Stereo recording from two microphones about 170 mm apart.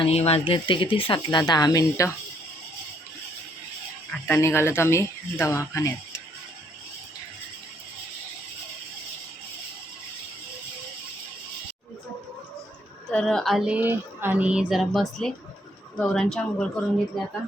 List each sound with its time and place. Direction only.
0.0 s speech: 35° left (ahead or behind); by 2.0 s 20° left (ahead or behind)
4.3 s speech: 15° left (ahead or behind)
13.1 s speech: 5° left (ahead or behind)